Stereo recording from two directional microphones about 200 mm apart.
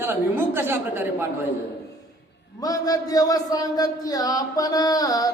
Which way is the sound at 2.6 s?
20° left (ahead or behind).